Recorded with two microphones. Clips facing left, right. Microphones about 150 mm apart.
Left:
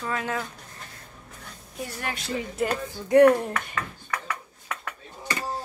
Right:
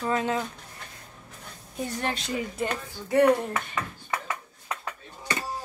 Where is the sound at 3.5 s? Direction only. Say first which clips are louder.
Even; 20° right (ahead or behind).